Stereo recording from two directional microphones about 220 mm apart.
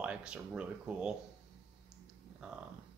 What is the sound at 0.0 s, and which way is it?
Speech, 5° right (ahead or behind).